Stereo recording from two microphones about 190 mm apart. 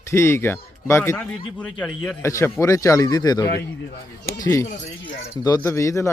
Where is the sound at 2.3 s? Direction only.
15° left (ahead or behind).